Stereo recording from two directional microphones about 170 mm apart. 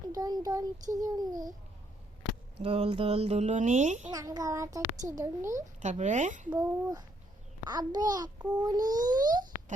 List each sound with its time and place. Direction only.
0.1 s a child's voice: 20° right (ahead or behind)
2.6 s speech: 35° right (ahead or behind)
4.1 s a child's voice: 20° right (ahead or behind)
5.5 s speech: 45° right (ahead or behind)
6.5 s a child's voice: 15° right (ahead or behind)